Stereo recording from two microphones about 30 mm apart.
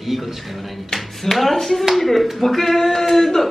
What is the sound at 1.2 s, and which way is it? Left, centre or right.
A man's voice, centre.